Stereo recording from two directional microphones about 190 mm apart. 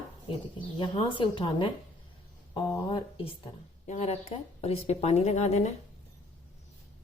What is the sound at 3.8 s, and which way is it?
Speech, 35° left (ahead or behind).